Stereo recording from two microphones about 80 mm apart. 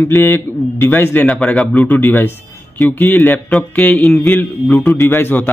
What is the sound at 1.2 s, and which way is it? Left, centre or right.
Speech, centre.